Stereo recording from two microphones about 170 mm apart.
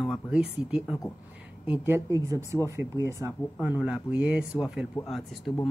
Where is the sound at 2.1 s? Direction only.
15° right (ahead or behind).